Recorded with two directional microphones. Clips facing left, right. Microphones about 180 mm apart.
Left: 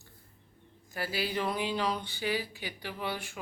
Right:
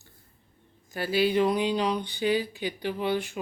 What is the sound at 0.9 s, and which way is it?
Speech, 25° right (ahead or behind).